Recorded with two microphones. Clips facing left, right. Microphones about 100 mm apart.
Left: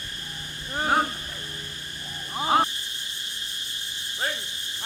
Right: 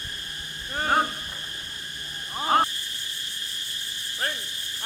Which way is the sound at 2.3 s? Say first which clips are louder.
Even; 5° left (ahead or behind).